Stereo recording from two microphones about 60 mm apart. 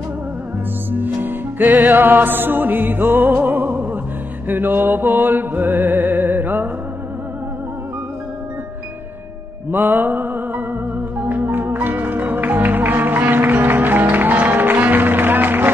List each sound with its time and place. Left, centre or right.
0.9 s music: right
9.7 s music: right